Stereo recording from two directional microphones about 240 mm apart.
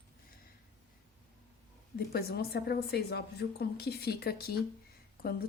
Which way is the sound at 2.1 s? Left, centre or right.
Left.